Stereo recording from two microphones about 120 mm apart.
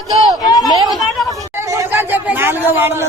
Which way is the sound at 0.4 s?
30° left (ahead or behind).